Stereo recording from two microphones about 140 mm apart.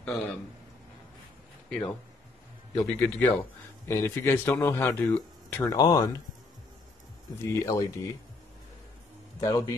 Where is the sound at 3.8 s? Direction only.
15° left (ahead or behind).